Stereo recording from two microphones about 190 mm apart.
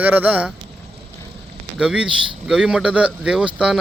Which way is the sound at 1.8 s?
5° right (ahead or behind).